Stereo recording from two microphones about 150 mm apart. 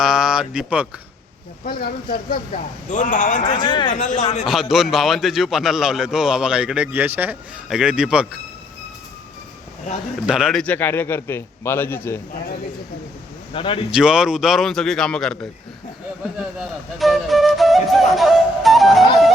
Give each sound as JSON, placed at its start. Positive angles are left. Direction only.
{"t": 0.0, "sound": "speech", "side_deg": -5}
{"t": 1.6, "sound": "a man's voice", "side_deg": 75}
{"t": 3.6, "sound": "speech", "side_deg": 30}
{"t": 3.9, "sound": "a man's voice", "side_deg": 55}
{"t": 4.7, "sound": "a man's voice", "side_deg": 0}
{"t": 10.2, "sound": "a man's voice", "side_deg": -5}
{"t": 10.6, "sound": "a man's voice", "side_deg": 10}
{"t": 13.5, "sound": "speech", "side_deg": 35}
{"t": 13.9, "sound": "a man's voice", "side_deg": -5}
{"t": 16.4, "sound": "flute", "side_deg": 0}